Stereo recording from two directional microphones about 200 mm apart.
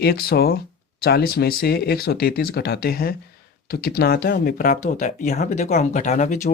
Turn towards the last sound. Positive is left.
turn(degrees=35)  # may be behind; listen again after turning